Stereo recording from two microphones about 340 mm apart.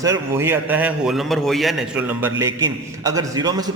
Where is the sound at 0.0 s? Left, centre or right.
Centre.